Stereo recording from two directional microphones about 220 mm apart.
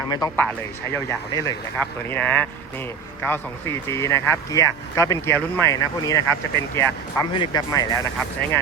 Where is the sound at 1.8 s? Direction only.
5° left (ahead or behind).